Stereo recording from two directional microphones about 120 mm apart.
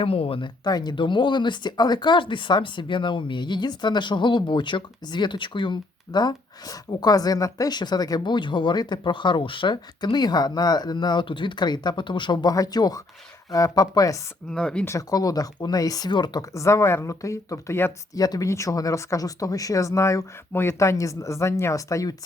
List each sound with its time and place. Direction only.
0.0 s speech: 50° left (ahead or behind); by 14.2 s 30° left (ahead or behind)
14.5 s speech: 5° left (ahead or behind)
14.8 s speech: 30° left (ahead or behind)
16.6 s speech: 25° left (ahead or behind)